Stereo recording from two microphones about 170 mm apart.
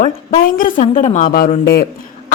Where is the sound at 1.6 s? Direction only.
70° left (ahead or behind).